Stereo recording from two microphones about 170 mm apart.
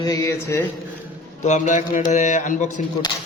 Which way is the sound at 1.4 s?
45° left (ahead or behind).